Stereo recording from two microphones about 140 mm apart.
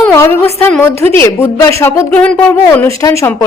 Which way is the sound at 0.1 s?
20° left (ahead or behind).